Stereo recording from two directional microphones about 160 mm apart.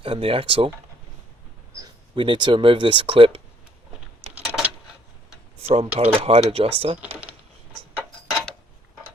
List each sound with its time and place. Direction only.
0.0 s speech: 35° right (ahead or behind)
1.8 s speech: 30° right (ahead or behind)
4.4 s a sound: centre (ahead or behind)
5.6 s speech: 40° right (ahead or behind)